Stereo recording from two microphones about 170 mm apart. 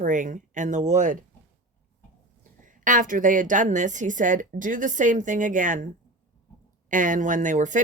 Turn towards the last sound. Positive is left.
turn(degrees=-50)  # may be behind; listen again after turning